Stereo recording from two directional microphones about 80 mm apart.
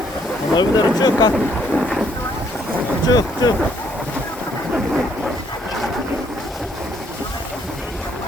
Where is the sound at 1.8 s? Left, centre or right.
Centre.